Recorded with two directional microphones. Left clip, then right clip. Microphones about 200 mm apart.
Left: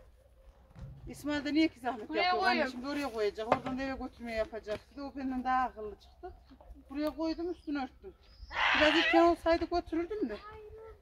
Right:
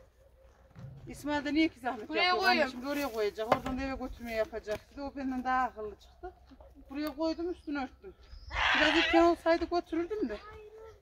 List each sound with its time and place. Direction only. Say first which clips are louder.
0.7 s speech: right 1 dB; 10° left (ahead or behind)
2.0 s speech: right 2 dB; 55° right (ahead or behind)
2.8 s speech: right 1 dB; 10° left (ahead or behind)
3.4 s speech: right 2 dB; 55° right (ahead or behind)
3.7 s speech: right 1 dB; 10° left (ahead or behind)
8.5 s speech: even; 25° right (ahead or behind)
9.2 s speech: right 1 dB; 10° left (ahead or behind)